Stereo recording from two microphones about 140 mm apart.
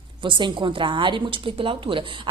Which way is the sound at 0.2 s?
35° right (ahead or behind).